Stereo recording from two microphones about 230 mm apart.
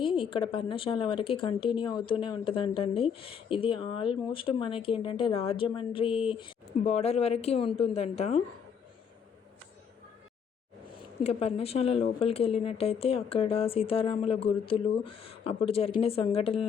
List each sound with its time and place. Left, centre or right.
0.0 s speech: left
10.8 s speech: left